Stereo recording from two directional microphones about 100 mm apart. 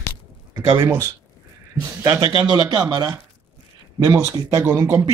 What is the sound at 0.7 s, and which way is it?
Speech, 30° right (ahead or behind).